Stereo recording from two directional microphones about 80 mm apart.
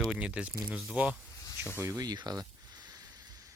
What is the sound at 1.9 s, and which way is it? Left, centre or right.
Speech, right.